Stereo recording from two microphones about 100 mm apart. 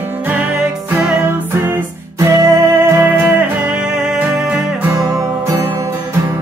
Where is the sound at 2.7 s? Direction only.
25° right (ahead or behind).